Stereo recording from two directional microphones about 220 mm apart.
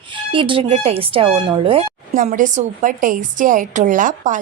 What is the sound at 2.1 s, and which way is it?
A woman's voice, 35° right (ahead or behind).